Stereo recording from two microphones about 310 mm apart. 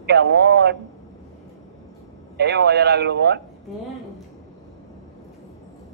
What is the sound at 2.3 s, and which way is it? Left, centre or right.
Speech, right.